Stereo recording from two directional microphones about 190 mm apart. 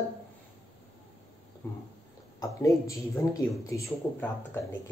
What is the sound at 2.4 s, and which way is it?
A man's voice, 15° left (ahead or behind).